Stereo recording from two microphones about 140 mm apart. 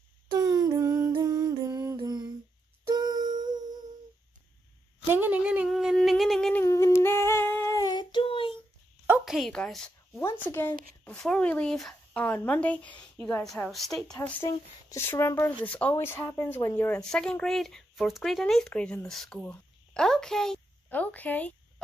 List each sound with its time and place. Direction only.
0.3 s humming: 25° right (ahead or behind)
2.9 s a sound: 30° right (ahead or behind)
5.0 s a sound: 15° right (ahead or behind)
6.5 s humming: 20° left (ahead or behind); by 8.5 s 35° left (ahead or behind)
9.2 s a woman's voice: centre (ahead or behind)
10.1 s speech: 15° left (ahead or behind)
14.9 s speech: 20° left (ahead or behind)
17.0 s speech: 5° left (ahead or behind)